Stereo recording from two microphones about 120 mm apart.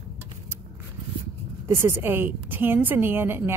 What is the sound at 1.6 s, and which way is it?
A woman's voice, 20° right (ahead or behind).